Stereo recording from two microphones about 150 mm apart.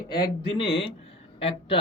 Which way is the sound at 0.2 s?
35° left (ahead or behind).